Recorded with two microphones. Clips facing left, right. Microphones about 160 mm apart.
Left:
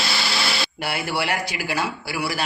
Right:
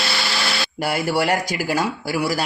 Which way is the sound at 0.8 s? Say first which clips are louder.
Right 8 dB; 40° right (ahead or behind).